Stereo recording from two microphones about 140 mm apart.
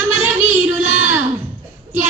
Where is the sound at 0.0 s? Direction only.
15° right (ahead or behind).